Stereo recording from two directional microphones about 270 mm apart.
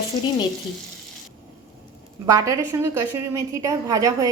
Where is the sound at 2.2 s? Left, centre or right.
Centre.